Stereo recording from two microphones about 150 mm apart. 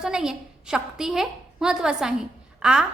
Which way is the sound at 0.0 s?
5° right (ahead or behind).